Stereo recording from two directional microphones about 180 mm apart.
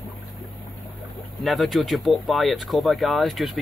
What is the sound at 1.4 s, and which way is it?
Speech, centre (ahead or behind).